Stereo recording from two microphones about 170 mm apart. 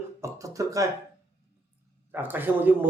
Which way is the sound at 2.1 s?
10° right (ahead or behind).